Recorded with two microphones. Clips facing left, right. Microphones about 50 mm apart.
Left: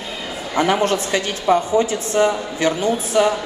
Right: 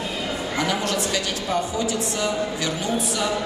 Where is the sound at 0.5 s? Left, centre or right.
Left.